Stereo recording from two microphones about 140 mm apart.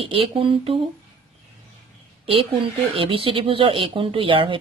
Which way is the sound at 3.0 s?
40° right (ahead or behind).